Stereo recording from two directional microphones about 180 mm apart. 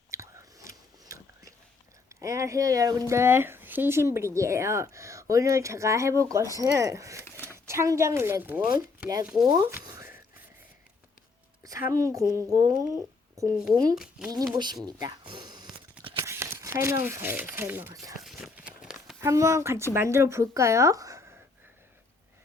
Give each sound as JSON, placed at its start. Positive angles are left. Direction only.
{"t": 0.1, "sound": "whispering", "side_deg": -15}
{"t": 2.0, "sound": "speech", "side_deg": -15}
{"t": 7.3, "sound": "a sound", "side_deg": 10}
{"t": 7.5, "sound": "speech", "side_deg": -15}
{"t": 9.6, "sound": "a sound", "side_deg": -15}
{"t": 11.9, "sound": "a woman's voice", "side_deg": -15}
{"t": 13.9, "sound": "speech", "side_deg": -5}
{"t": 14.5, "sound": "a woman's voice", "side_deg": -25}
{"t": 14.8, "sound": "a sound", "side_deg": -20}
{"t": 18.2, "sound": "run", "side_deg": 0}
{"t": 19.2, "sound": "speech", "side_deg": -15}